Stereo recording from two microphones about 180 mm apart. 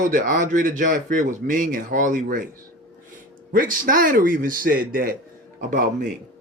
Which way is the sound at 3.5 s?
50° right (ahead or behind).